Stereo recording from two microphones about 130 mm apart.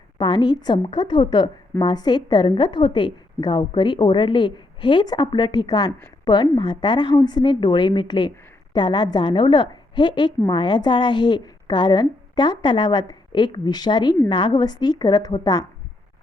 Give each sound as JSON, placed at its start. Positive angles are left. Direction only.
{"t": 0.2, "sound": "a woman's voice", "side_deg": 35}